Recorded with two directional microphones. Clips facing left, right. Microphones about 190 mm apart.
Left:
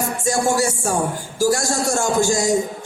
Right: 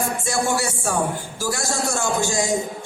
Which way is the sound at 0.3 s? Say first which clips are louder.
Left 6 dB; 40° left (ahead or behind).